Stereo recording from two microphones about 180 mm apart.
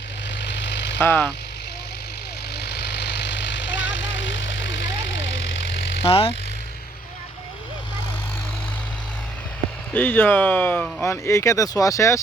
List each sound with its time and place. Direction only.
0.3 s vehicle: 75° left (ahead or behind)
0.9 s speech: 10° left (ahead or behind)
2.6 s vehicle: 70° left (ahead or behind); by 5.3 s 90° left
6.1 s speech: 30° left (ahead or behind)
9.9 s speech: 10° left (ahead or behind)